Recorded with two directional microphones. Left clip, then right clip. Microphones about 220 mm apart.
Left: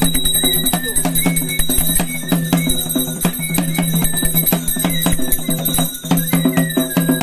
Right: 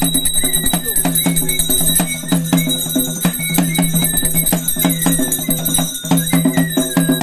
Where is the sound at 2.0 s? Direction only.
35° left (ahead or behind).